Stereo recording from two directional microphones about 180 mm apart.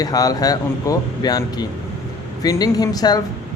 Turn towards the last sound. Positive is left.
turn(degrees=20)  # may be behind; listen again after turning